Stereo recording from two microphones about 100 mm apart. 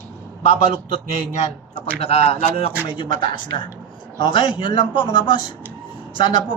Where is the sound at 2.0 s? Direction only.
90° left.